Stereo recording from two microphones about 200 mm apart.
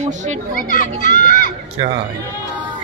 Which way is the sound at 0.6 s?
45° left (ahead or behind).